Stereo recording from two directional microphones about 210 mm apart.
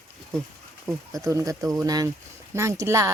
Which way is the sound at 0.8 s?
15° right (ahead or behind).